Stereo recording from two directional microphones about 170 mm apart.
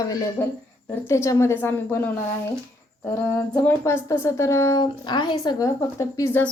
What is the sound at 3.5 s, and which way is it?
A woman's voice, 10° left (ahead or behind).